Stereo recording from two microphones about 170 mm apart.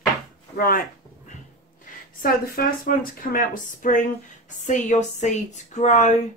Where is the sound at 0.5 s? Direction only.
60° left (ahead or behind).